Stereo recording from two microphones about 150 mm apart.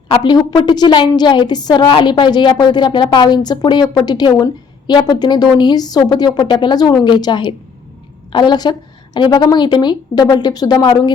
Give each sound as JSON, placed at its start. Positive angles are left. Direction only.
{"t": 0.1, "sound": "a woman's voice", "side_deg": 30}